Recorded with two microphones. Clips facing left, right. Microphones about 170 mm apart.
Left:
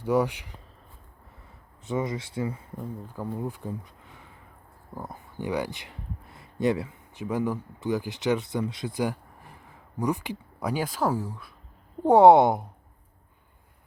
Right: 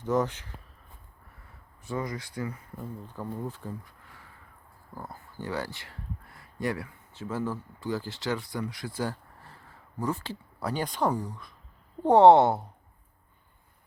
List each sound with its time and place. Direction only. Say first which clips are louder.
0.0 s speech: left 3 dB; 10° left (ahead or behind)
1.8 s speech: left 4 dB; 20° left (ahead or behind)
3.1 s speech: left 3 dB; 10° left (ahead or behind)